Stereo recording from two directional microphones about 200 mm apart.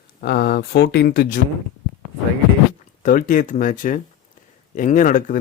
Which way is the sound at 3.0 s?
45° left (ahead or behind).